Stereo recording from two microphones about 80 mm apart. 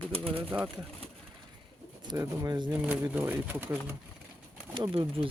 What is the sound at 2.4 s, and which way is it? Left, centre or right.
Speech, right.